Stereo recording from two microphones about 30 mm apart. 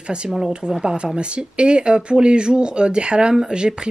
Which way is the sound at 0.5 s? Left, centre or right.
Right.